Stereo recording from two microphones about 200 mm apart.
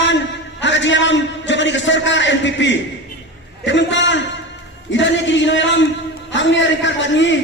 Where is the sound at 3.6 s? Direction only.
65° left (ahead or behind).